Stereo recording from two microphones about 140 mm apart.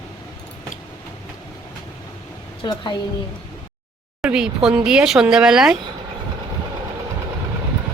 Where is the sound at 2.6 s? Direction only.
35° left (ahead or behind).